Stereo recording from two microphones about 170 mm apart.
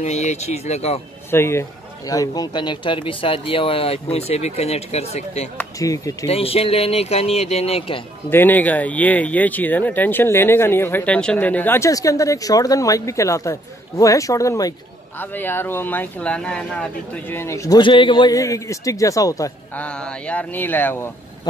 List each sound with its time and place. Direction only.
0.0 s speech: 40° left (ahead or behind)
1.3 s speech: 15° left (ahead or behind); by 5.5 s 40° left (ahead or behind)
5.6 s speech: 20° left (ahead or behind)
6.2 s speech: 35° left (ahead or behind)
8.3 s speech: 10° left (ahead or behind)
19.8 s speech: 5° left (ahead or behind)